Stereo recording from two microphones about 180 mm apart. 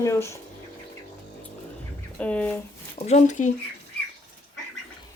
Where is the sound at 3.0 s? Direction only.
40° left (ahead or behind).